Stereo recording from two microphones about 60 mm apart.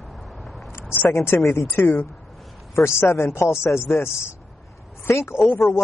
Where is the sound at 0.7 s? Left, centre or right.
Left.